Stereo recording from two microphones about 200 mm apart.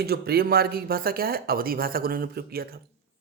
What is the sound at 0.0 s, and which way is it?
Speech, 50° right (ahead or behind).